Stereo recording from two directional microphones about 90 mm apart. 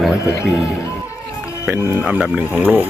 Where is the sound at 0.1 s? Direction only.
35° left (ahead or behind).